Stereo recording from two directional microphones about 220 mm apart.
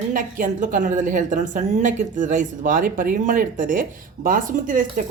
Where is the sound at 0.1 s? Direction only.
35° right (ahead or behind).